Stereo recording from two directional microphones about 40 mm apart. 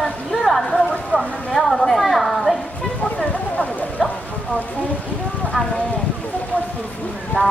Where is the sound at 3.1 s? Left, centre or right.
Left.